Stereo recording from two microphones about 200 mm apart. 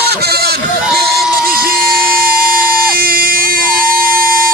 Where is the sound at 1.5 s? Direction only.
45° right (ahead or behind).